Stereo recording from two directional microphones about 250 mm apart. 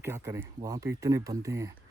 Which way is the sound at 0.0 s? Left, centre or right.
Centre.